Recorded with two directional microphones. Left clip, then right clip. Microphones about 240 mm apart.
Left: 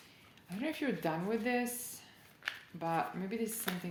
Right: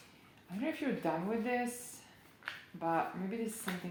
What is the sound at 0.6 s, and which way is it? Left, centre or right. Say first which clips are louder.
Speech: even; left.